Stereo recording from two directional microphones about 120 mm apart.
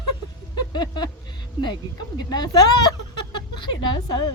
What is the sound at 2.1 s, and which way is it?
Speech, 35° left (ahead or behind).